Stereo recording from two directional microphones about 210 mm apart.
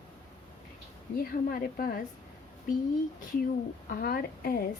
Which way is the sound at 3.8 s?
45° left (ahead or behind).